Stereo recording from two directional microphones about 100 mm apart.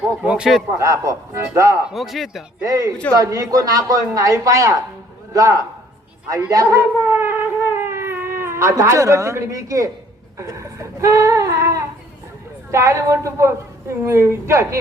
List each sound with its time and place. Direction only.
0.0 s a man's voice: 10° right (ahead or behind)
0.8 s speech: 30° right (ahead or behind)
1.9 s a man's voice: centre (ahead or behind)
2.6 s speech: 35° right (ahead or behind)
7.0 s a sound: 25° right (ahead or behind)
10.3 s a woman's voice: 30° right (ahead or behind)